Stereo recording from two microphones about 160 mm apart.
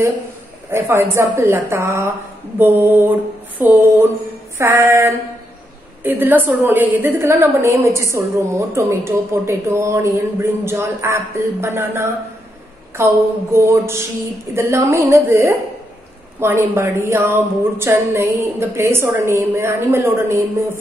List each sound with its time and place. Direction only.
0.7 s a woman's voice: 15° right (ahead or behind)